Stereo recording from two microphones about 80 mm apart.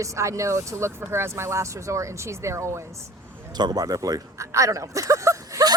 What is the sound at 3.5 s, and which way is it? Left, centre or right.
Speech, right.